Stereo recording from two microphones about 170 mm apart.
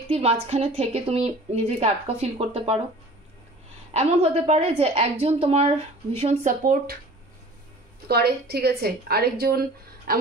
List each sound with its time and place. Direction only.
0.1 s a woman's voice: 35° right (ahead or behind)
3.9 s a woman's voice: 40° right (ahead or behind)
6.6 s speech: 55° right (ahead or behind)
8.1 s speech: 70° right (ahead or behind)